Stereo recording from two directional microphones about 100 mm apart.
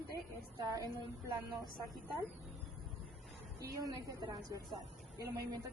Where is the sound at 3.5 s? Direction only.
40° right (ahead or behind).